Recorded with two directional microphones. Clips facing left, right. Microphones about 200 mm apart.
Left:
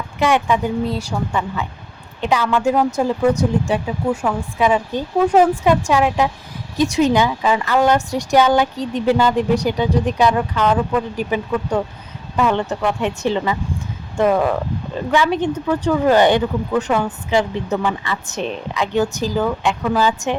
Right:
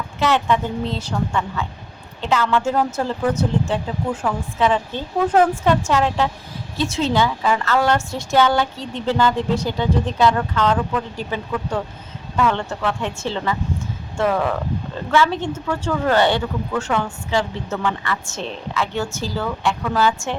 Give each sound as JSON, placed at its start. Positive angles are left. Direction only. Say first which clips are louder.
{"t": 0.2, "sound": "a woman's voice", "louder": "left 2 dB", "side_deg": 10}